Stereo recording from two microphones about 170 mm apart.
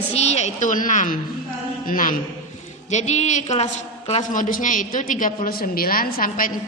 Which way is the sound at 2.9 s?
45° left (ahead or behind).